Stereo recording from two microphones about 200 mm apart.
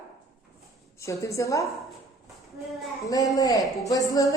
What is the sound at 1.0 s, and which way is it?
Speech, 15° left (ahead or behind).